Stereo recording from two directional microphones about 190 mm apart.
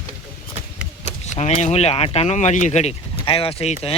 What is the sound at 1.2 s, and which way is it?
Speech, 35° left (ahead or behind).